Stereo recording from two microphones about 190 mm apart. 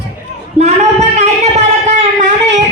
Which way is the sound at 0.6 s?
10° right (ahead or behind).